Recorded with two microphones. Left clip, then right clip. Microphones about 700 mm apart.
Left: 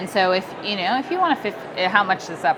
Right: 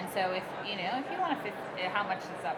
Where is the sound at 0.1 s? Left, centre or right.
Left.